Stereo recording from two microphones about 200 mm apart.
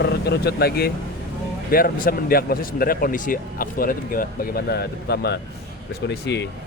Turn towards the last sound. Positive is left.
turn(degrees=60)  # may be behind; listen again after turning